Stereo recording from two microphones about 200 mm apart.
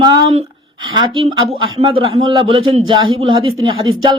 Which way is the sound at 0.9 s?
25° right (ahead or behind).